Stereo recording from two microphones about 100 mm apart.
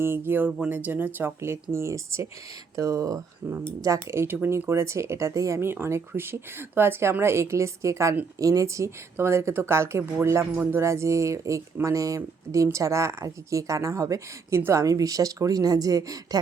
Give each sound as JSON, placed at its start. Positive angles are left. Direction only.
{"t": 0.0, "sound": "speech", "side_deg": -20}